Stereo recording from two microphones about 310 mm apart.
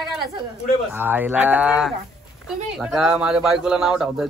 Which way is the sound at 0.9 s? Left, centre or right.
Centre.